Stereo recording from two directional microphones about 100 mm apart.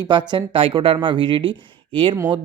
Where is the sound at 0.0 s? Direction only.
50° right (ahead or behind).